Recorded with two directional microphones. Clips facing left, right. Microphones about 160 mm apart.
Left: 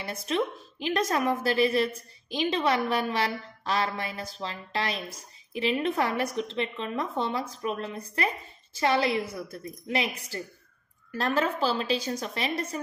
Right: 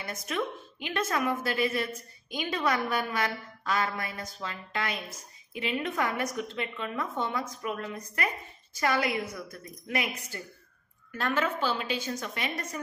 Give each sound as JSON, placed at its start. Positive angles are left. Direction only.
{"t": 0.0, "sound": "a woman's voice", "side_deg": 30}